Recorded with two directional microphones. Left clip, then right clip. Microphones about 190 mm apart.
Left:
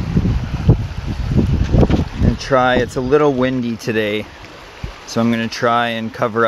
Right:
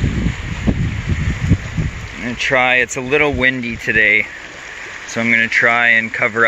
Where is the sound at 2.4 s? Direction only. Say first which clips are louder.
Right 1 dB; 25° left (ahead or behind); by 5.5 s 45° left (ahead or behind).